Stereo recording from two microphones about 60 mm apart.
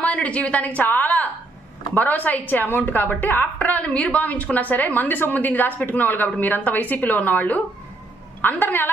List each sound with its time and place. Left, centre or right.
0.0 s a woman's voice: left